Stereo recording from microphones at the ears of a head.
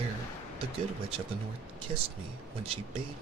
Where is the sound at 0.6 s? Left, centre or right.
Right.